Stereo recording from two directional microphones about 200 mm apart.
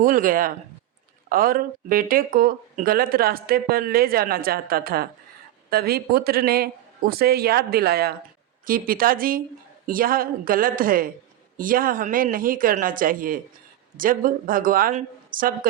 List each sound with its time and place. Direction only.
0.0 s speech: 40° right (ahead or behind)